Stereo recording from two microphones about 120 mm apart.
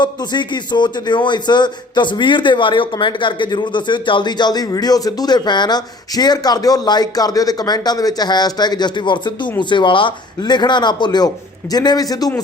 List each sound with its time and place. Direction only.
0.0 s speech: 35° left (ahead or behind)